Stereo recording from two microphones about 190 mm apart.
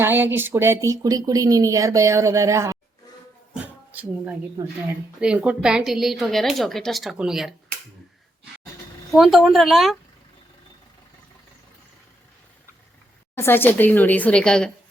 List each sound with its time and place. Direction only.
0.0 s speech: 10° right (ahead or behind)
3.5 s a sound: 5° right (ahead or behind)
4.6 s a woman's voice: 15° right (ahead or behind)
9.1 s a woman's voice: centre (ahead or behind)
13.3 s a woman's voice: 10° left (ahead or behind)